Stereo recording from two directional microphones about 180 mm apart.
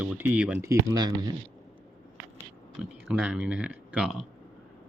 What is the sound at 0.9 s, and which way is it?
Speech, 20° right (ahead or behind).